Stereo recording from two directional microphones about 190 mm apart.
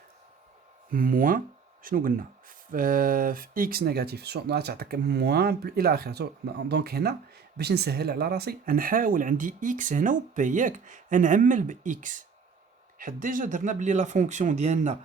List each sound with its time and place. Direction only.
0.9 s speech: 50° right (ahead or behind)